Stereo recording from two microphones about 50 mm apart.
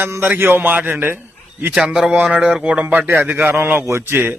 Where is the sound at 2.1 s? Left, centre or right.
Right.